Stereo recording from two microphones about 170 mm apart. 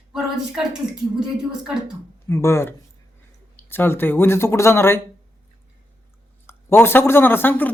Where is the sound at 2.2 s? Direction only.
15° left (ahead or behind).